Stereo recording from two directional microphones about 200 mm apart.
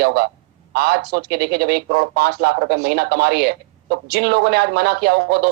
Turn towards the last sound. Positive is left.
turn(degrees=-55)  # may be behind; listen again after turning